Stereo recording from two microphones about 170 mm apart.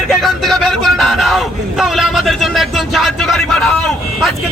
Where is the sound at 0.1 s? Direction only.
Centre (ahead or behind).